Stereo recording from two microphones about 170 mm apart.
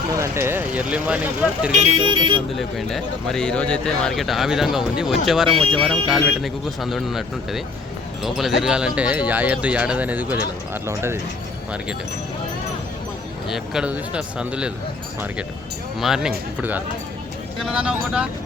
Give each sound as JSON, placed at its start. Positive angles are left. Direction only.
{"t": 0.1, "sound": "speech", "side_deg": -15}
{"t": 1.7, "sound": "speech", "side_deg": -40}
{"t": 2.6, "sound": "speech", "side_deg": 0}
{"t": 13.5, "sound": "speech", "side_deg": -5}
{"t": 16.0, "sound": "speech", "side_deg": -5}